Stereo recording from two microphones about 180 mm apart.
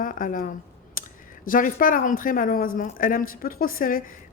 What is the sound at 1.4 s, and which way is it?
A woman's voice, 50° left (ahead or behind).